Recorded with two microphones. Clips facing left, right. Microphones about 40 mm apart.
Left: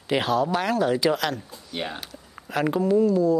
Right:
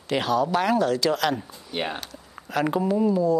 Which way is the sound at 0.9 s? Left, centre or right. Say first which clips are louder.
Left 1 dB; centre.